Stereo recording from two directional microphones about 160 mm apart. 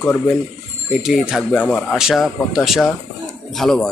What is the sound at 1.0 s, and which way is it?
Speech, 5° right (ahead or behind).